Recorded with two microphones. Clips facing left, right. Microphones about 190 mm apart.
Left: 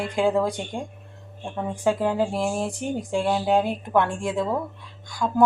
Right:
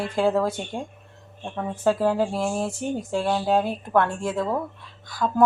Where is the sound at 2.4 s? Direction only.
10° left (ahead or behind).